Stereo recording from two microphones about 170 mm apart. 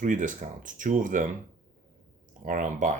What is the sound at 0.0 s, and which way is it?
Speech, 50° right (ahead or behind).